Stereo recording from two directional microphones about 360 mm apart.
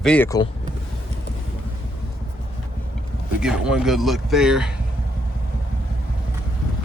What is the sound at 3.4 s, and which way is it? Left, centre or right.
Speech, centre.